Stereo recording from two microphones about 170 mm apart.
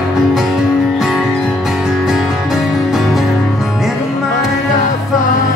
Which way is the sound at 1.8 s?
Centre (ahead or behind).